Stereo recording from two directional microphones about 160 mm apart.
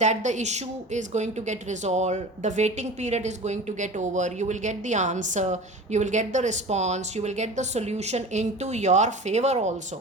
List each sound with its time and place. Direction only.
0.0 s a woman's voice: 50° right (ahead or behind)